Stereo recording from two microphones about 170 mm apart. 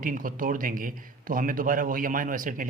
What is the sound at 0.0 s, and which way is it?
A man's voice, 55° right (ahead or behind).